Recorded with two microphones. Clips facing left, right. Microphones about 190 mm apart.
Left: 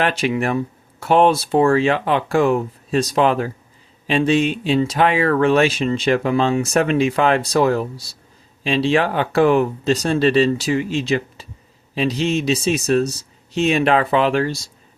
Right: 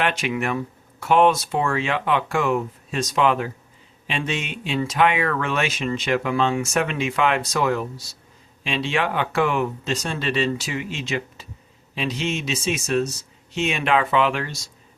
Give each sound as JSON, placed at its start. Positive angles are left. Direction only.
{"t": 0.0, "sound": "speech", "side_deg": 35}